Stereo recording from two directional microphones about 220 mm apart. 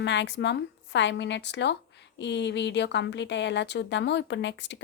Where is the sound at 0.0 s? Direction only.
55° left (ahead or behind).